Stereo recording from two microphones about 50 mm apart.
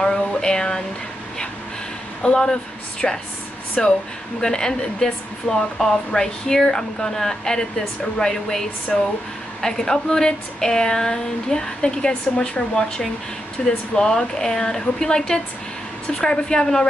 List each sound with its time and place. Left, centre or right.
0.0 s a sound: centre
2.3 s a woman's voice: centre
5.8 s a woman's voice: centre